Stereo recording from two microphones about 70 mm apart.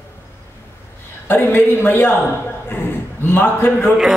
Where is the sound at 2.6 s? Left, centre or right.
Left.